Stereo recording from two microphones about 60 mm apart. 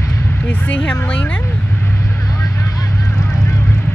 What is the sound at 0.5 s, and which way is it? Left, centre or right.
Speech, left.